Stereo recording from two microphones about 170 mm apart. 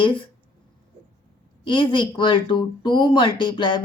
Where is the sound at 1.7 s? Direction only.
30° left (ahead or behind).